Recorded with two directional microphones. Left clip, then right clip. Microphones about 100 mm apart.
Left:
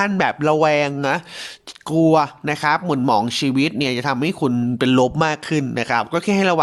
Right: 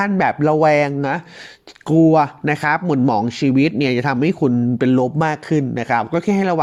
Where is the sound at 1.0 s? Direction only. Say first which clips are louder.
Left 1 dB; 10° left (ahead or behind).